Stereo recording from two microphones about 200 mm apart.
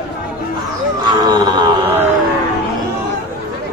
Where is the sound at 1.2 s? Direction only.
20° right (ahead or behind).